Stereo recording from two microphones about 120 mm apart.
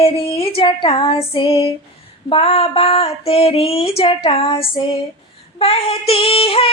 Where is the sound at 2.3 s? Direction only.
55° left (ahead or behind).